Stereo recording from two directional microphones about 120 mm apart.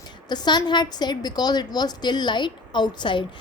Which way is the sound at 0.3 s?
35° left (ahead or behind).